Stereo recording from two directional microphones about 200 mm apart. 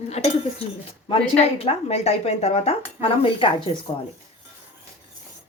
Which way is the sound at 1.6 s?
30° left (ahead or behind).